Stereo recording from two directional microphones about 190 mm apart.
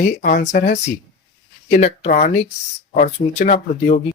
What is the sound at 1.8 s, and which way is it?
Speech, 40° left (ahead or behind).